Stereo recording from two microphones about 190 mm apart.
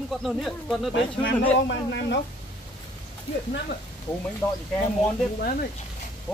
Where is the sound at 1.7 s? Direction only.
65° left (ahead or behind).